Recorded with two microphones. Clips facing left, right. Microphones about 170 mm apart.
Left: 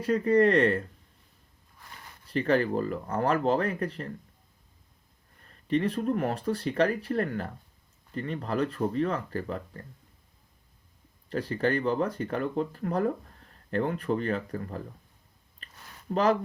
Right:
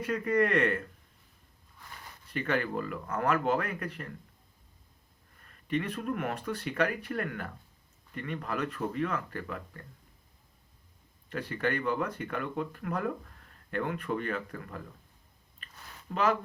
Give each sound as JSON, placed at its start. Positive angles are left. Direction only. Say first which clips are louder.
{"t": 0.0, "sound": "speech", "louder": "left 6 dB", "side_deg": 30}
{"t": 2.3, "sound": "speech", "louder": "left 6 dB", "side_deg": 35}
{"t": 5.5, "sound": "speech", "louder": "left 5 dB", "side_deg": 35}
{"t": 11.3, "sound": "speech", "louder": "left 5 dB", "side_deg": 35}
{"t": 15.6, "sound": "a sound", "louder": "left 6 dB", "side_deg": 35}